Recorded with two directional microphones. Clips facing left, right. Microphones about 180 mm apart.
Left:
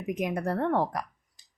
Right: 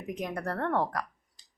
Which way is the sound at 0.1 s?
15° left (ahead or behind).